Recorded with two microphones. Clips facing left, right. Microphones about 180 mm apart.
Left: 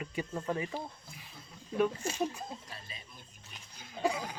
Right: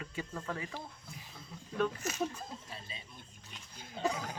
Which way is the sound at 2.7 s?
25° right (ahead or behind).